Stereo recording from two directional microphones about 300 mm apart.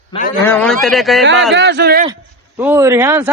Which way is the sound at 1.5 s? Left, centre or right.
Right.